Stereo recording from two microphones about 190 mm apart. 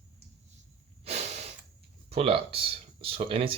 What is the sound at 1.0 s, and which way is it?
Snort, 35° right (ahead or behind).